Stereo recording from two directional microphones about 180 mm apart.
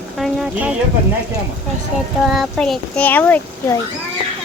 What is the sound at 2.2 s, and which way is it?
A child's voice, centre (ahead or behind).